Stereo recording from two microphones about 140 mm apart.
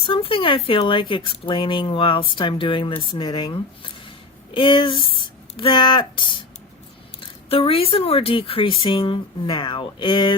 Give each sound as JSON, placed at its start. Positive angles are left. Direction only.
{"t": 0.0, "sound": "speech", "side_deg": 40}